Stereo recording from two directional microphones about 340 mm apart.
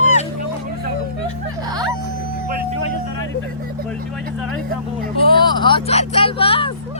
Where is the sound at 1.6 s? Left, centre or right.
Centre.